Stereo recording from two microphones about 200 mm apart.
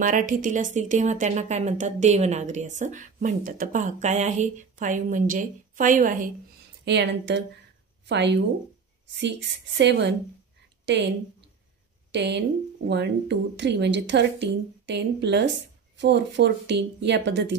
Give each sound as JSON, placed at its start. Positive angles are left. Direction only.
{"t": 0.0, "sound": "a woman's voice", "side_deg": -40}
{"t": 6.8, "sound": "speech", "side_deg": -60}
{"t": 9.8, "sound": "speech", "side_deg": -60}
{"t": 12.1, "sound": "speech", "side_deg": -60}